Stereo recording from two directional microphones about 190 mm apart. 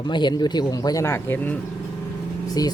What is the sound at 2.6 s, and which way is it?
Speech, 20° left (ahead or behind).